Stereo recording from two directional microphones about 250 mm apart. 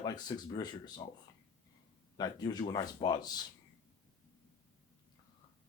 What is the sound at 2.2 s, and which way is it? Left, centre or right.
Speech, centre.